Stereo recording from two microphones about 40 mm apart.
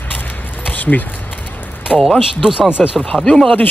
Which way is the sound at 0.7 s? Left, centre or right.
Left.